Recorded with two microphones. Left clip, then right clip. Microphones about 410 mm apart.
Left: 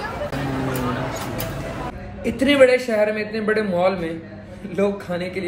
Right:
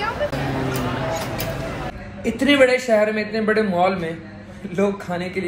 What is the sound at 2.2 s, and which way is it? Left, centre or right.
A man's voice, centre.